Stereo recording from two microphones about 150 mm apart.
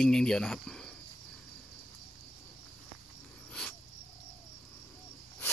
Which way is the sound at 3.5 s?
5° left (ahead or behind).